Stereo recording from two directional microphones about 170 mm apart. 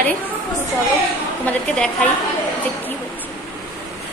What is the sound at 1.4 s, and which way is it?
Speech, 5° left (ahead or behind).